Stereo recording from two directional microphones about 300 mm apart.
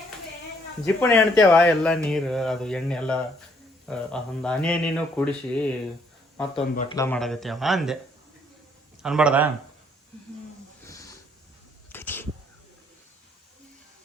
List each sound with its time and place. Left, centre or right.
0.9 s speech: centre
6.7 s speech: centre
9.0 s a man's voice: centre
10.8 s a sound: centre